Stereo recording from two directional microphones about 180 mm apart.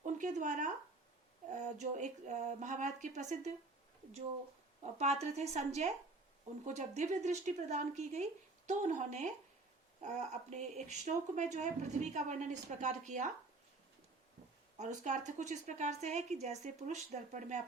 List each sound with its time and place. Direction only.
0.0 s a sound: 45° right (ahead or behind)
1.5 s speech: 40° right (ahead or behind)
4.8 s speech: 40° right (ahead or behind)
14.8 s speech: 40° right (ahead or behind)